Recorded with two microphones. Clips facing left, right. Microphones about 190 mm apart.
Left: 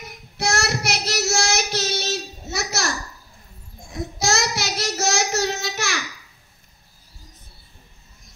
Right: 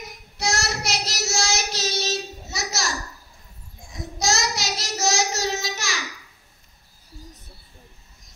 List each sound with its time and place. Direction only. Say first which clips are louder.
0.4 s child singing: left 3 dB; 60° left (ahead or behind)
3.9 s child singing: left 2 dB; 60° left (ahead or behind)